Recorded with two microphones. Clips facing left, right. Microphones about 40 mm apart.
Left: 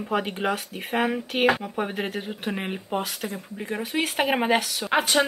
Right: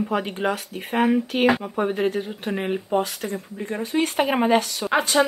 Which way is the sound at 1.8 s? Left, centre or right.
Centre.